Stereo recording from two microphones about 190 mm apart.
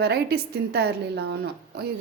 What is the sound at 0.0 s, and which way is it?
A woman's voice, 55° right (ahead or behind).